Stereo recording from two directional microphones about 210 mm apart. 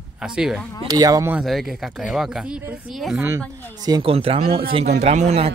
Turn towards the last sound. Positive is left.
turn(degrees=-30)  # may be behind; listen again after turning